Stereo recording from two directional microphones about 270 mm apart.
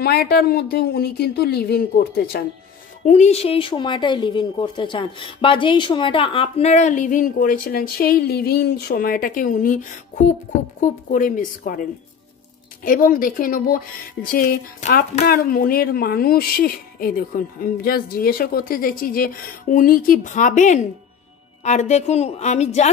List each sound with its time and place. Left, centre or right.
0.0 s speech: left
3.1 s speech: left